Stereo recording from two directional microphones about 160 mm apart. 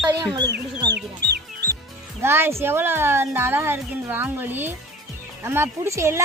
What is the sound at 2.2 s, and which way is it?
A woman's voice, 15° right (ahead or behind).